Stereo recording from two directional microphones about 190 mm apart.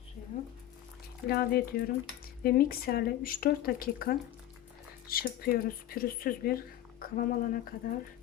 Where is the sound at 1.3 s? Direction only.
55° left (ahead or behind).